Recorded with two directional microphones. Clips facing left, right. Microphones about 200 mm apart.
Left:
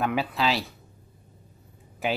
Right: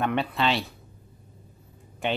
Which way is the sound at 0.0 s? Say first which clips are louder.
Even; centre (ahead or behind).